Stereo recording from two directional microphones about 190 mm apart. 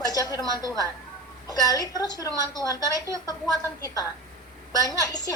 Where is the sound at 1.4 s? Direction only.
20° left (ahead or behind).